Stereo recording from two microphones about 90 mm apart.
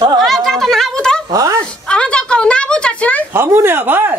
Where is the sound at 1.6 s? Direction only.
10° left (ahead or behind).